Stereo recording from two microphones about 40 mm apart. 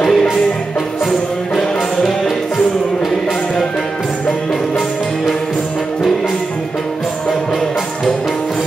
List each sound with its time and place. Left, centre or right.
0.0 s music: centre
2.0 s music: centre